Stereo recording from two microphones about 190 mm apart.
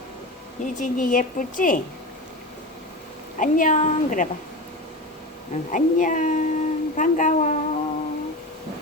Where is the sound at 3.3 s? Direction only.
45° left (ahead or behind).